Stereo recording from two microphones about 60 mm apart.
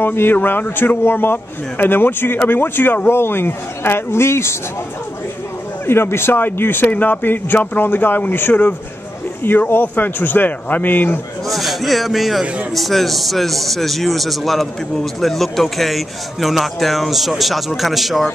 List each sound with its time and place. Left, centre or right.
0.0 s a man's voice: left
5.9 s a man's voice: left
11.4 s speech: centre